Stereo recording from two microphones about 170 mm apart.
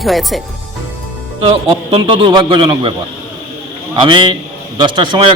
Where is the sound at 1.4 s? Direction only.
30° right (ahead or behind).